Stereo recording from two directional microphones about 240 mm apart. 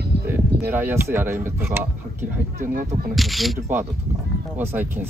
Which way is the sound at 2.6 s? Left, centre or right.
Right.